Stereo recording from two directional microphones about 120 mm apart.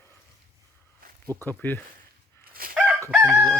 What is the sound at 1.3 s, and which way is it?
Speech, 30° right (ahead or behind).